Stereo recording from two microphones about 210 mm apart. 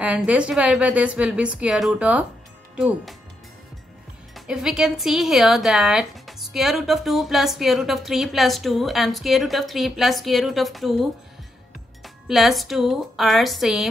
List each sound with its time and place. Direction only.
0.0 s speech: 5° right (ahead or behind)
4.5 s speech: 5° right (ahead or behind)